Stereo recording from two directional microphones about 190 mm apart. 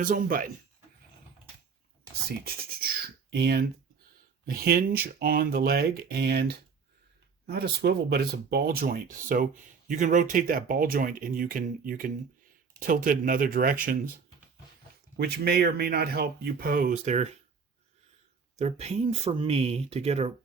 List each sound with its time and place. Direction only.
0.0 s speech: 45° right (ahead or behind)
3.2 s speech: 60° right (ahead or behind)
15.2 s speech: 55° right (ahead or behind)
18.5 s speech: 35° right (ahead or behind)